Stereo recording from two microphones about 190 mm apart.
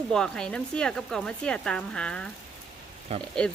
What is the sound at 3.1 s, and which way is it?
Speech, 30° right (ahead or behind).